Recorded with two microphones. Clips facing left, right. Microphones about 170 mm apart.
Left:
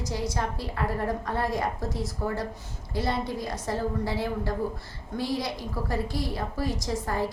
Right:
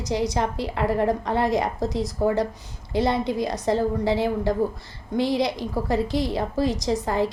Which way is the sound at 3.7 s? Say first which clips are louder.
Right 7 dB; 90° right.